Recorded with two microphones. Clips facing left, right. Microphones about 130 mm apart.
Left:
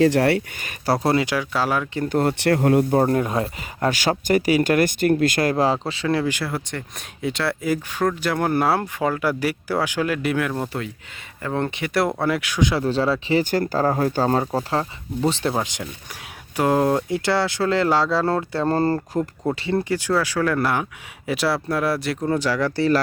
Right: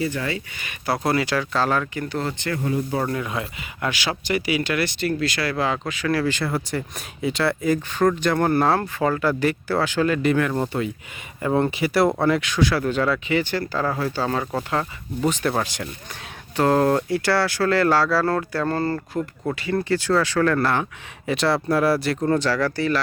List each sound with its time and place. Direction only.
0.0 s speech: 80° left
0.6 s speech: 35° left (ahead or behind); by 1.9 s 10° left (ahead or behind)
2.0 s speech: 50° left (ahead or behind)
2.4 s speech: 70° left (ahead or behind)
3.0 s speech: 40° left (ahead or behind); by 6.4 s 20° left (ahead or behind)
6.4 s speech: centre (ahead or behind); by 12.8 s 15° left (ahead or behind)
12.8 s speech: 30° left (ahead or behind)
15.5 s speech: 15° left (ahead or behind)
19.8 s speech: 15° left (ahead or behind)
22.7 s speech: 30° left (ahead or behind)